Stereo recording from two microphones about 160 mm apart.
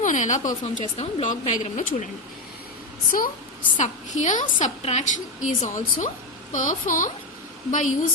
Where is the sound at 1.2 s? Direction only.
50° left (ahead or behind).